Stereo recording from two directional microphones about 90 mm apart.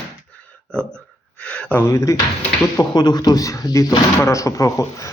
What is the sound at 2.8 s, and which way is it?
Speech, 50° left (ahead or behind).